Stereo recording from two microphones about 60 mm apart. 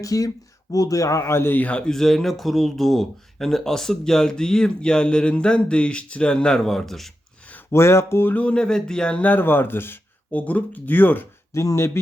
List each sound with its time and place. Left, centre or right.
0.0 s a man's voice: left
1.5 s speech: left
1.9 s speech: centre
7.7 s speech: left
8.3 s speech: left
8.5 s speech: centre
9.3 s speech: left
10.3 s speech: left
11.5 s speech: left